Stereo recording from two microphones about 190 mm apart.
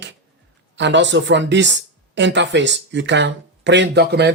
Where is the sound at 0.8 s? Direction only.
70° right (ahead or behind).